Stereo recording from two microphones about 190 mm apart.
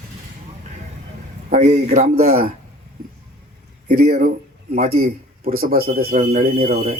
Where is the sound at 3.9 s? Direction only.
55° right (ahead or behind).